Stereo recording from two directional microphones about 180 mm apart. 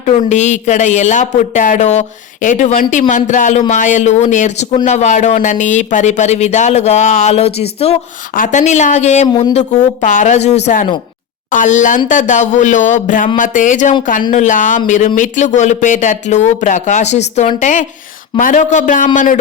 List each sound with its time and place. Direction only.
0.0 s speech: 40° left (ahead or behind)